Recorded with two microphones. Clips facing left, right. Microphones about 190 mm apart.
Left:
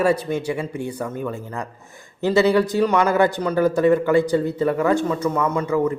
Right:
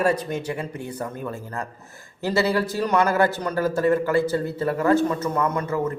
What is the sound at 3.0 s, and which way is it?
A man's voice, 15° left (ahead or behind).